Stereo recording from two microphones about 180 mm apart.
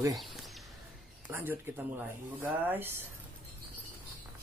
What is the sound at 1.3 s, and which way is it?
Speech, 10° right (ahead or behind).